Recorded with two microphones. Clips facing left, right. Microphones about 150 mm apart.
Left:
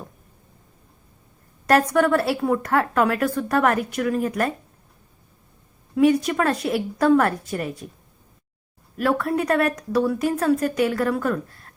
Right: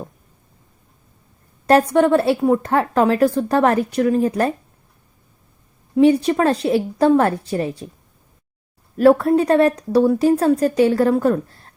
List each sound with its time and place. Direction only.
1.6 s a woman's voice: 25° right (ahead or behind)
6.0 s a woman's voice: 30° right (ahead or behind)
9.0 s speech: 35° right (ahead or behind)